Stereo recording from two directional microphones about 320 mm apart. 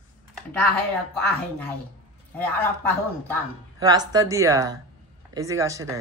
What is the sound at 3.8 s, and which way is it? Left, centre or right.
Speech, centre.